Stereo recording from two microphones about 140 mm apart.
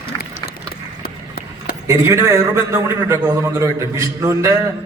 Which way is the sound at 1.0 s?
90° left.